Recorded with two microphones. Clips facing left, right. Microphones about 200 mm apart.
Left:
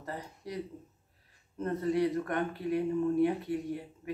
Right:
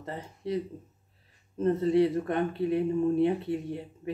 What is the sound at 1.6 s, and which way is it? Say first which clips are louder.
Speech: right 6 dB; 25° right (ahead or behind).